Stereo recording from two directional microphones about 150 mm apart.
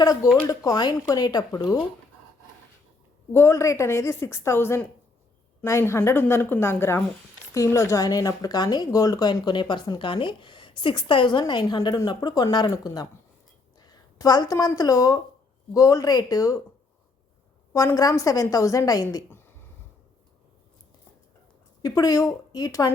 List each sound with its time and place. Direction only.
0.0 s speech: 25° left (ahead or behind)
3.3 s a woman's voice: 15° left (ahead or behind)
17.7 s speech: 20° left (ahead or behind)
21.8 s speech: 25° left (ahead or behind)